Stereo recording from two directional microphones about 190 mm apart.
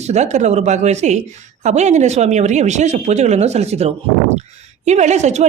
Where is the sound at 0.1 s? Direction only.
35° right (ahead or behind).